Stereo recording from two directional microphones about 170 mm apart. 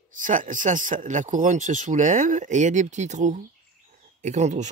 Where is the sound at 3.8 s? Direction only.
45° right (ahead or behind).